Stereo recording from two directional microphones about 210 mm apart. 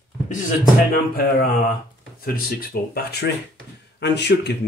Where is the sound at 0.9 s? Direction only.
45° left (ahead or behind).